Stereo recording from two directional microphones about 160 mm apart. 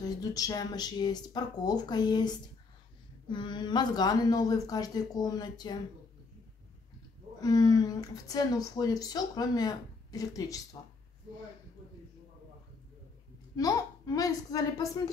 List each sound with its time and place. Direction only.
0.0 s speech: 20° left (ahead or behind)
7.3 s speech: 25° left (ahead or behind)
13.6 s speech: 20° left (ahead or behind)